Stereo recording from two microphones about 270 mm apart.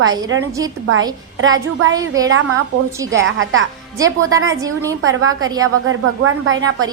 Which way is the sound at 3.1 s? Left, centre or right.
Right.